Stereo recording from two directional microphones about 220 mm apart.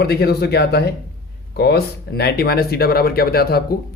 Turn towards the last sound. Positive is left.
turn(degrees=45)  # may be behind; listen again after turning